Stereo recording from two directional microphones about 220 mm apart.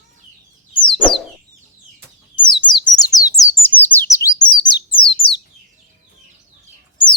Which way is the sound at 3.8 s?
10° left (ahead or behind).